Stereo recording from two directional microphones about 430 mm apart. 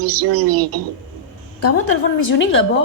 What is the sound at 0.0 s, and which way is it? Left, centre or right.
Speech, right.